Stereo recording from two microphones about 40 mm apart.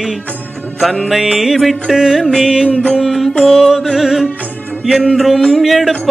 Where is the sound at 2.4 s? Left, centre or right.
Centre.